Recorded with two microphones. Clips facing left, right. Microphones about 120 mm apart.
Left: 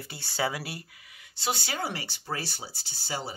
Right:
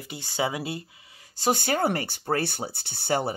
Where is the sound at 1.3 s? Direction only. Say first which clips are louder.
Right 8 dB; 45° right (ahead or behind).